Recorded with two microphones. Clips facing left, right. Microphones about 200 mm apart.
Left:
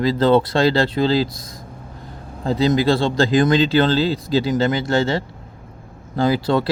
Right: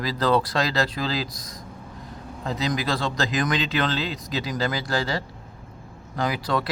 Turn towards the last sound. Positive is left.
turn(degrees=25)  # may be behind; listen again after turning